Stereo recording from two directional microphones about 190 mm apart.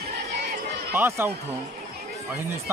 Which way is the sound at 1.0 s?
10° right (ahead or behind).